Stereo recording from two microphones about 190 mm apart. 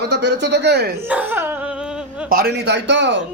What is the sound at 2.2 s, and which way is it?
Speech, 55° right (ahead or behind).